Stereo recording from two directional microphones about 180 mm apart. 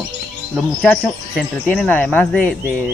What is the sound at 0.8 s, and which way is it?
Speech, 5° left (ahead or behind).